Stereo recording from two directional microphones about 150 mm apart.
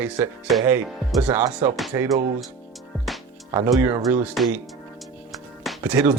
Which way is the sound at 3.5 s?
15° right (ahead or behind).